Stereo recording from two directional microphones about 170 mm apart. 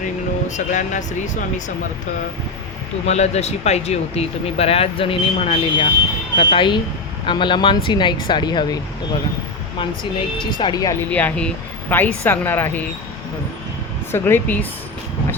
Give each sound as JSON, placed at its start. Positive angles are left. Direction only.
{"t": 0.4, "sound": "speech", "side_deg": 45}
{"t": 3.1, "sound": "speech", "side_deg": 40}
{"t": 11.1, "sound": "speech", "side_deg": 10}
{"t": 14.1, "sound": "speech", "side_deg": 10}